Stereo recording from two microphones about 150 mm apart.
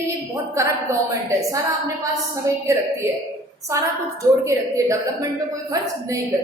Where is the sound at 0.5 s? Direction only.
20° right (ahead or behind).